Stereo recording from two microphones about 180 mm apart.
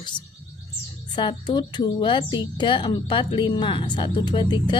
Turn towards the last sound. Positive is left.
turn(degrees=25)  # may be behind; listen again after turning